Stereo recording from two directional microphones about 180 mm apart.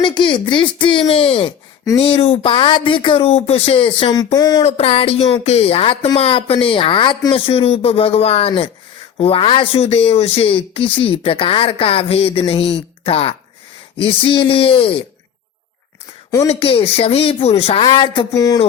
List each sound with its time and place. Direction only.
0.0 s speech: 25° left (ahead or behind)
4.6 s speech: 35° left (ahead or behind)
13.9 s a sound: 30° left (ahead or behind)
14.3 s speech: 30° left (ahead or behind)
16.5 s speech: 30° left (ahead or behind)